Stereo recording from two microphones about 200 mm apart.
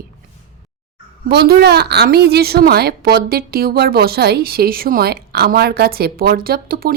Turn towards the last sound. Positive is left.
turn(degrees=-50)  # may be behind; listen again after turning